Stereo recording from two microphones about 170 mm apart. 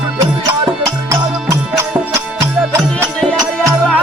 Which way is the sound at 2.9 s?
5° left (ahead or behind).